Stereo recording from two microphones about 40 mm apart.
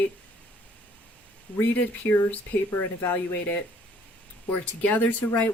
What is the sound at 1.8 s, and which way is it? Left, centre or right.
Speech, left.